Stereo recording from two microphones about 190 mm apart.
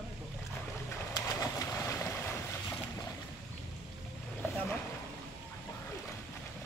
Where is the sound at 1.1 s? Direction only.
15° left (ahead or behind).